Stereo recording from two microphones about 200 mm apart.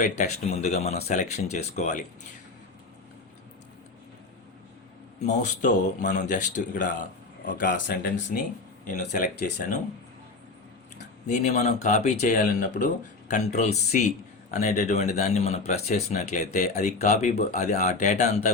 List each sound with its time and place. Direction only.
0.0 s speech: 35° left (ahead or behind)
5.2 s speech: 35° left (ahead or behind)
7.7 s speech: 65° left (ahead or behind)
8.9 s speech: 40° left (ahead or behind)
11.3 s speech: 35° left (ahead or behind)